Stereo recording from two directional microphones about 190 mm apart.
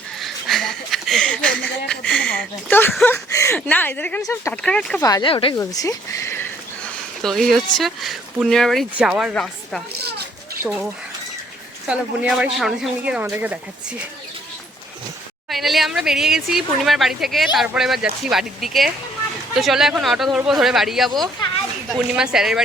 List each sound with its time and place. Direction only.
0.2 s a sound: centre (ahead or behind)
2.0 s speech: 5° left (ahead or behind)
5.0 s speech: 20° left (ahead or behind)
5.5 s speech: 15° left (ahead or behind)
7.2 s speech: centre (ahead or behind)
11.9 s speech: 5° right (ahead or behind)
15.4 s speech: centre (ahead or behind)